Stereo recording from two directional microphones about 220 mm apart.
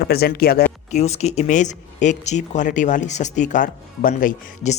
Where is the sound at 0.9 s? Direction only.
30° left (ahead or behind).